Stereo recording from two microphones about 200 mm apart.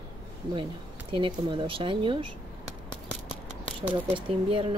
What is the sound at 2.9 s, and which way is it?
Scissors, centre (ahead or behind).